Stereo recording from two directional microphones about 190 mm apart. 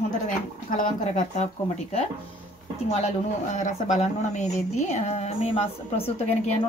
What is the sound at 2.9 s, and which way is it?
Speech, 40° left (ahead or behind).